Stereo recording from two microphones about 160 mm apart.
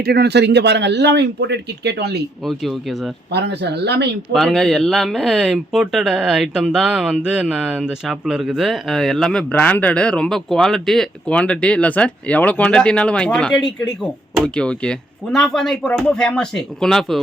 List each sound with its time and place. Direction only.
0.0 s a man's voice: 90° right
3.3 s a man's voice: 90° right
4.3 s speech: centre (ahead or behind)